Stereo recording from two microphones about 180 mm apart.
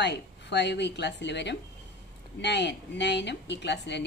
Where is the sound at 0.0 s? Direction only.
70° left (ahead or behind).